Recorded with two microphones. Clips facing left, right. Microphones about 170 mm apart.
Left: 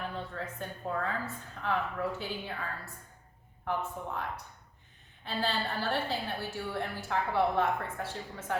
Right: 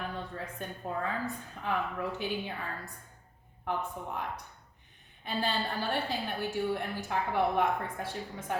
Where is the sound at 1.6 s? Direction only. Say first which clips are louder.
Left 1 dB; 15° right (ahead or behind).